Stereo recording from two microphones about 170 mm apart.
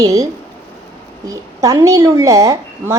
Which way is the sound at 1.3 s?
20° right (ahead or behind).